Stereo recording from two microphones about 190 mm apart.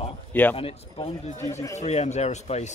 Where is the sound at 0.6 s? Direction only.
30° left (ahead or behind).